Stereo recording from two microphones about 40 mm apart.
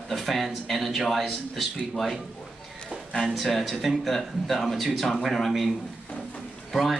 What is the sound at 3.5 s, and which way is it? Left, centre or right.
Speech, centre.